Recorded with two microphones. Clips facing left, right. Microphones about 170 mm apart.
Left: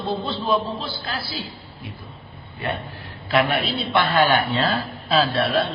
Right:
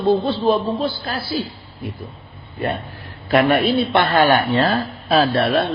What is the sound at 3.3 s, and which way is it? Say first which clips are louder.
A man's voice: right 6 dB; 50° right (ahead or behind).